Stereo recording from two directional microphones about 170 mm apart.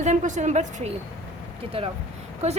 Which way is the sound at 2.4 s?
40° right (ahead or behind).